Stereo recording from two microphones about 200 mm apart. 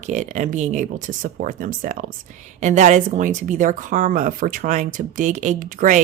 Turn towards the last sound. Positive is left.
turn(degrees=-40)  # may be behind; listen again after turning